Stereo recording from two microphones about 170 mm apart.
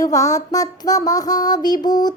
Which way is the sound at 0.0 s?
20° left (ahead or behind).